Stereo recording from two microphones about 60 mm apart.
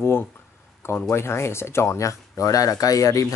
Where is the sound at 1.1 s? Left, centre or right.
Left.